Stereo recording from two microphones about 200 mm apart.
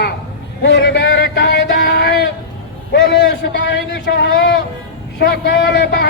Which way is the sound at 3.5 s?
60° left (ahead or behind).